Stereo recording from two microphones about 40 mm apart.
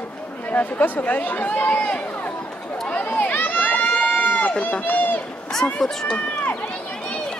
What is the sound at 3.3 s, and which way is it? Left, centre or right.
Run, left.